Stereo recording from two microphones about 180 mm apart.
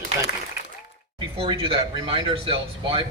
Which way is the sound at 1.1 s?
30° right (ahead or behind).